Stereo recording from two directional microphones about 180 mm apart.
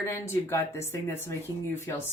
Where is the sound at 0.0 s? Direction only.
15° left (ahead or behind).